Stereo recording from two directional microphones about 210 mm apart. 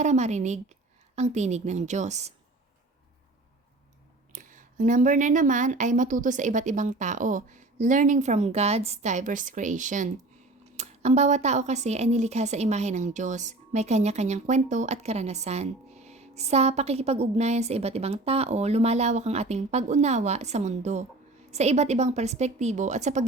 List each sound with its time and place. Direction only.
0.0 s a woman's voice: 35° right (ahead or behind)
4.3 s a woman's voice: 35° right (ahead or behind)